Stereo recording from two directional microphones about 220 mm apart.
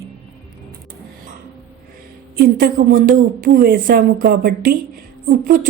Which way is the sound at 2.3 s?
40° right (ahead or behind).